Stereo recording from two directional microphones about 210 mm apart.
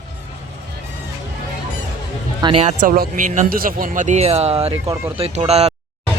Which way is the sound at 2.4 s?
25° right (ahead or behind).